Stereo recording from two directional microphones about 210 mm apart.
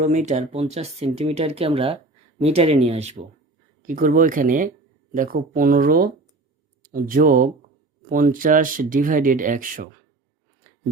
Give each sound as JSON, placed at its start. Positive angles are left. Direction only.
{"t": 0.0, "sound": "speech", "side_deg": -35}